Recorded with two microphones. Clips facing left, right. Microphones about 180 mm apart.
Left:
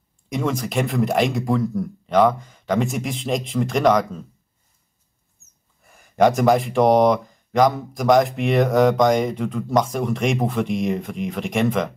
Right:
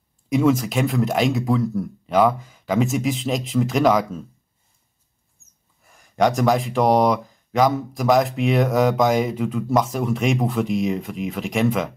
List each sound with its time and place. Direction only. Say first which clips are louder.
0.3 s speech: right 6 dB; centre (ahead or behind)
5.9 s speech: left 3 dB; centre (ahead or behind)